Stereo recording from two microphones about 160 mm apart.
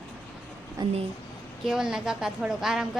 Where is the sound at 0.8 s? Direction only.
25° right (ahead or behind).